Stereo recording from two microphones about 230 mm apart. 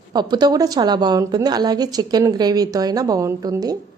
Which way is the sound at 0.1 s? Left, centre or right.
Centre.